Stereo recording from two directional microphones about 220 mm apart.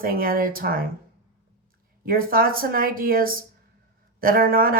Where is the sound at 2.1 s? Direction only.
40° right (ahead or behind).